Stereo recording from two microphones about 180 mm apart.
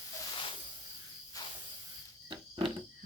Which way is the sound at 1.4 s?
20° left (ahead or behind).